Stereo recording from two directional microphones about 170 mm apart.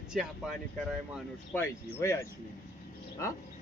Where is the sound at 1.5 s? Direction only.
15° left (ahead or behind).